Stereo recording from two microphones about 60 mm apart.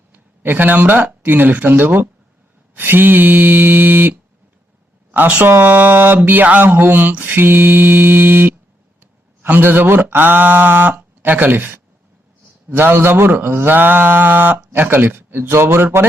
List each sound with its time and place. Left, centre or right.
0.1 s speech: right
5.4 s speech: right